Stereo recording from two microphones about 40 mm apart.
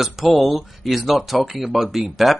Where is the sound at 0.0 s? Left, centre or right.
Centre.